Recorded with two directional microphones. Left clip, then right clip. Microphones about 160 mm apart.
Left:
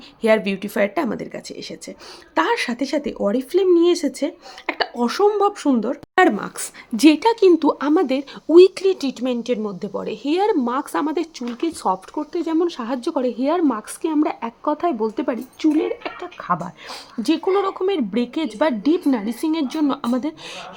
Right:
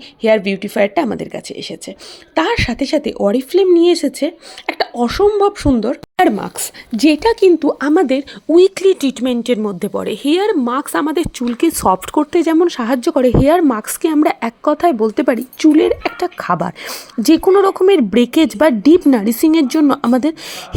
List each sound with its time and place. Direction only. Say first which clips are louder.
0.2 s speech: right 4 dB; 15° right (ahead or behind)
6.9 s speech: right 2 dB; 5° right (ahead or behind)
8.7 s speech: right 7 dB; 25° right (ahead or behind)
10.4 s speech: right 4 dB; 20° right (ahead or behind)
11.4 s speech: right 9 dB; 35° right (ahead or behind)
12.5 s speech: right 8 dB; 30° right (ahead or behind)
16.2 s speech: right 5 dB; 40° right (ahead or behind)
16.8 s speech: right 8 dB; 25° right (ahead or behind)